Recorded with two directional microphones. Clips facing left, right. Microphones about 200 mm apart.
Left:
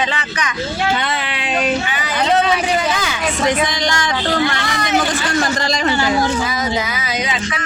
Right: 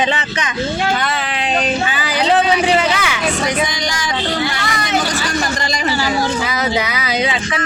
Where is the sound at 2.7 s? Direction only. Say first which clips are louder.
Right 2 dB; 80° right.